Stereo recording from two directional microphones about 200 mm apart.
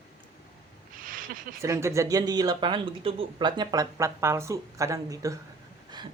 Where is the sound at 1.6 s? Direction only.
15° right (ahead or behind).